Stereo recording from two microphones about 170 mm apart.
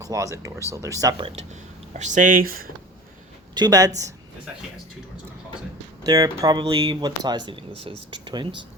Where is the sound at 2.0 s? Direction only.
45° right (ahead or behind).